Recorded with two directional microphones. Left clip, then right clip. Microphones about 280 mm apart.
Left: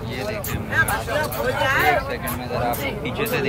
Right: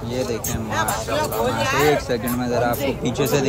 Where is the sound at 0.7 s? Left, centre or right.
Right.